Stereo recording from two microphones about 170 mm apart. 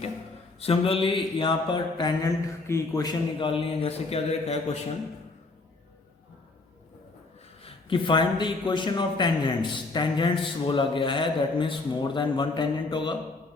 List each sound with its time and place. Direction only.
0.6 s mantra: 35° left (ahead or behind)
7.6 s mantra: 30° left (ahead or behind)